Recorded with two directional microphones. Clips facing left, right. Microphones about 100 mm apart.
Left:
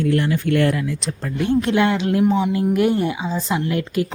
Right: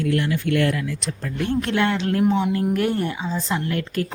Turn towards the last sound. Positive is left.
turn(degrees=15)  # may be behind; listen again after turning